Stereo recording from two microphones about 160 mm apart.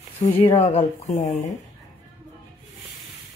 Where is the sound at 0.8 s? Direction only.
50° left (ahead or behind).